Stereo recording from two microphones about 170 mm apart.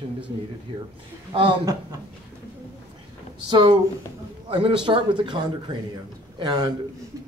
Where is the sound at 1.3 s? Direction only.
30° right (ahead or behind).